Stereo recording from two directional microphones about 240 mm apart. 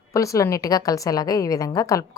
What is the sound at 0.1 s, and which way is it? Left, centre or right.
A woman's voice, centre.